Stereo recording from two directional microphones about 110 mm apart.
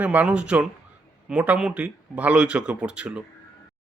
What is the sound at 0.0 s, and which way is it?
Speech, 15° right (ahead or behind).